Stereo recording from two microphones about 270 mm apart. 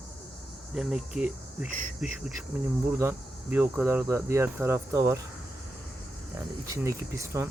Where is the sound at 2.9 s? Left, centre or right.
Centre.